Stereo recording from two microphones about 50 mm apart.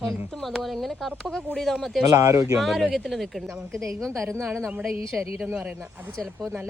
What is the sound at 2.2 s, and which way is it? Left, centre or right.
Speech, right.